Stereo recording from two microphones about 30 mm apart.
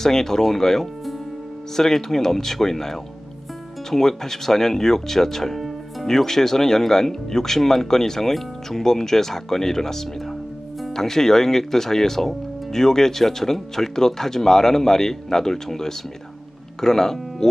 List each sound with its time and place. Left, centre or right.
0.0 s speech: centre